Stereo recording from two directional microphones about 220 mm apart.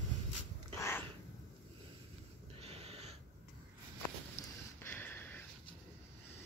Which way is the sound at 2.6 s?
25° right (ahead or behind).